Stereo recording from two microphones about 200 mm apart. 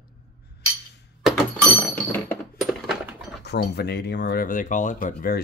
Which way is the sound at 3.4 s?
55° left (ahead or behind).